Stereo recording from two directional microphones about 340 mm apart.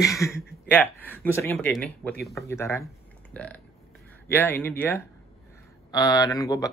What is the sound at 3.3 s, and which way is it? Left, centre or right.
Burping, centre.